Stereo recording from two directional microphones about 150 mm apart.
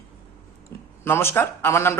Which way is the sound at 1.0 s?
15° left (ahead or behind).